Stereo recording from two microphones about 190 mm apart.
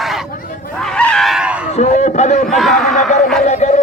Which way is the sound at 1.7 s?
40° left (ahead or behind).